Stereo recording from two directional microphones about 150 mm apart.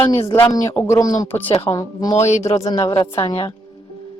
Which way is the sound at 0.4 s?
25° left (ahead or behind).